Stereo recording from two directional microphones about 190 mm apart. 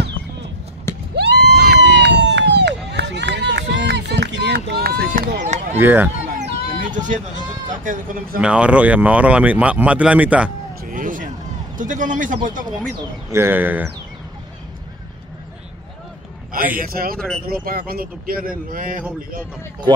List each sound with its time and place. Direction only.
1.1 s crowd: 65° right (ahead or behind)
5.8 s speech: 10° right (ahead or behind)
6.2 s a sound: 40° right (ahead or behind)
7.7 s speech: 45° right (ahead or behind)
8.4 s speech: 5° right (ahead or behind)
10.9 s a sound: 45° right (ahead or behind)
11.7 s speech: 45° right (ahead or behind)
13.3 s speech: 10° right (ahead or behind)
16.8 s speech: 50° right (ahead or behind)